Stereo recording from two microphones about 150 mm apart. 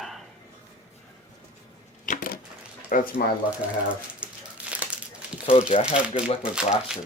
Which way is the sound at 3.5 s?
10° right (ahead or behind).